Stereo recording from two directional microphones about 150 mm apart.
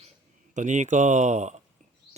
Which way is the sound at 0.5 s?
55° right (ahead or behind).